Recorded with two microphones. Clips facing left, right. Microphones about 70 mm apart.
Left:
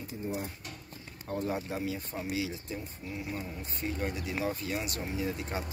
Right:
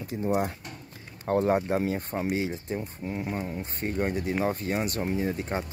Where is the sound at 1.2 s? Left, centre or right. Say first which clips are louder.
Right 10 dB; right.